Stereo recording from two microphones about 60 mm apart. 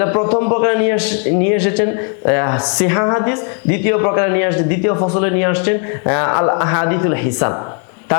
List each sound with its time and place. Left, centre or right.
0.0 s a man's voice: left